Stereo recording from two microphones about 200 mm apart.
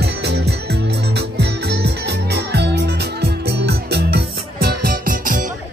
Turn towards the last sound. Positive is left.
turn(degrees=-45)  # may be behind; listen again after turning